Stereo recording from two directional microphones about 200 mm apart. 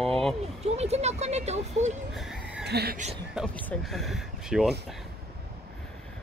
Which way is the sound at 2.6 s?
55° right (ahead or behind).